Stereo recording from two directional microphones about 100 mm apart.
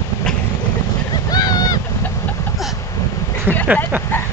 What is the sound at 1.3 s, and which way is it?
Boat, 40° left (ahead or behind).